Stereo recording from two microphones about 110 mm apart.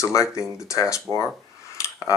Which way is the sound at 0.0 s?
30° left (ahead or behind).